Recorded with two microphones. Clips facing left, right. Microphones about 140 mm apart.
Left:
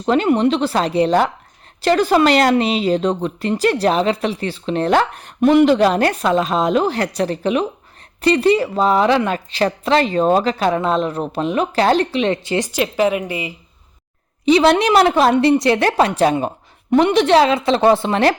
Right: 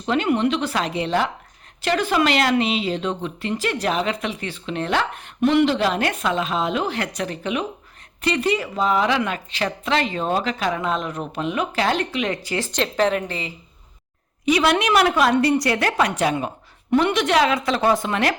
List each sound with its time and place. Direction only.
0.0 s speech: 40° left (ahead or behind); by 12.7 s 20° left (ahead or behind)
12.7 s a woman's voice: 5° left (ahead or behind)
14.4 s a woman's voice: 30° left (ahead or behind)